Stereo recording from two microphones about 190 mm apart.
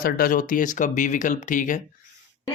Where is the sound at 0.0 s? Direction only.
50° left (ahead or behind).